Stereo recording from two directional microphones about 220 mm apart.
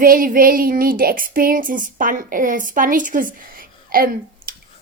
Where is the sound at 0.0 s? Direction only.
40° right (ahead or behind).